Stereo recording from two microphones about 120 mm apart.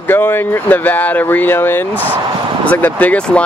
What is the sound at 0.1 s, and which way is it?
Speech, 15° left (ahead or behind).